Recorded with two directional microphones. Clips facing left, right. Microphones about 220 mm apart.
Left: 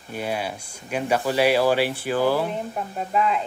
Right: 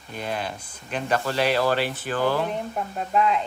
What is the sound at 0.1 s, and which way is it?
A woman's voice, 10° left (ahead or behind).